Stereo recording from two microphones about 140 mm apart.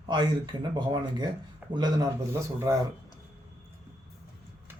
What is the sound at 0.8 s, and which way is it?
Speech, 30° right (ahead or behind).